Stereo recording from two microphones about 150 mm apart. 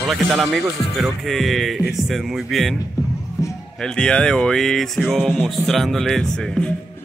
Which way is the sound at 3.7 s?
5° left (ahead or behind).